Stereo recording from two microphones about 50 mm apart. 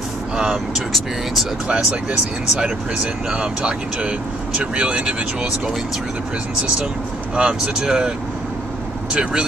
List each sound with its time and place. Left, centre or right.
0.4 s speech: centre
3.3 s speech: right
7.3 s speech: centre
9.1 s speech: centre